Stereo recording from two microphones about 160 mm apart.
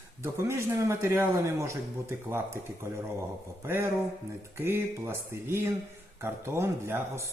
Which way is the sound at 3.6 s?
15° right (ahead or behind).